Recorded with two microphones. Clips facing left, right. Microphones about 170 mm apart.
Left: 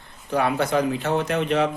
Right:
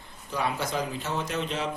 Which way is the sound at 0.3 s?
60° left (ahead or behind).